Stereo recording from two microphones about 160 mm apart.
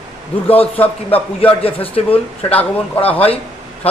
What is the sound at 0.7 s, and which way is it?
Speech, 10° left (ahead or behind).